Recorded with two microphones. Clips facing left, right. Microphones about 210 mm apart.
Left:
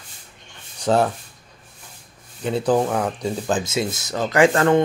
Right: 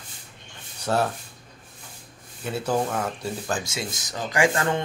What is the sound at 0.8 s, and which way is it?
Speech, 15° left (ahead or behind).